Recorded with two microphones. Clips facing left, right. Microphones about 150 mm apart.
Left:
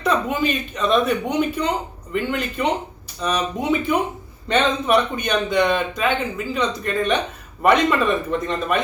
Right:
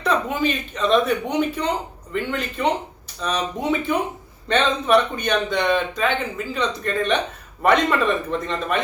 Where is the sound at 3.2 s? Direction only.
5° left (ahead or behind).